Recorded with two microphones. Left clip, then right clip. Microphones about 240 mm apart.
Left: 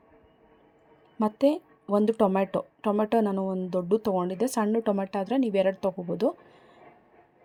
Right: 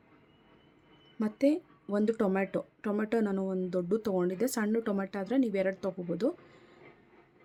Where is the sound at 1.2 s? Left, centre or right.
Centre.